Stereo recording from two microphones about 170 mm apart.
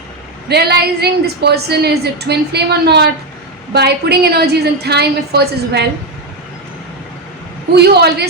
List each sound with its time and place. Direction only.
0.4 s a woman's voice: 70° right (ahead or behind)
7.8 s a woman's voice: 75° right (ahead or behind)